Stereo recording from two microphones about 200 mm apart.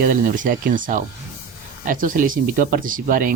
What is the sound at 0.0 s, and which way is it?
Speech, 45° right (ahead or behind).